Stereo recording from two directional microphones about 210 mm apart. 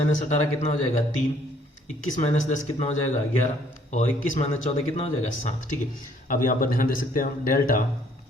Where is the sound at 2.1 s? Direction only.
35° left (ahead or behind).